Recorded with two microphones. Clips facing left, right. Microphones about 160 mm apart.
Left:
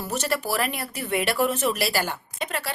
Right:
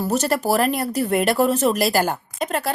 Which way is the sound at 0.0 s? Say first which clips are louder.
Right 7 dB; 40° right (ahead or behind).